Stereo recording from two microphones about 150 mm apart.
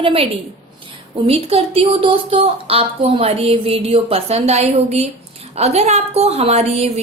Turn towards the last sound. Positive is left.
turn(degrees=-45)  # may be behind; listen again after turning